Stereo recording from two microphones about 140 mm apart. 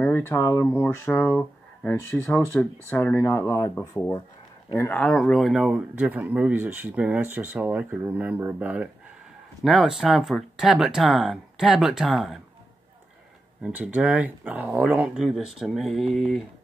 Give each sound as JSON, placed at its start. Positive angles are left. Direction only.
{"t": 0.0, "sound": "speech", "side_deg": 15}
{"t": 4.7, "sound": "speech", "side_deg": 10}
{"t": 9.6, "sound": "speech", "side_deg": 0}
{"t": 13.6, "sound": "speech", "side_deg": -10}